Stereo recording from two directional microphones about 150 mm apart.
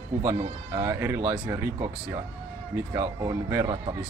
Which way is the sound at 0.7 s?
15° right (ahead or behind).